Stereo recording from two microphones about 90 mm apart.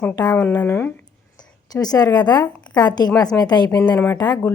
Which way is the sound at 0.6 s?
25° left (ahead or behind).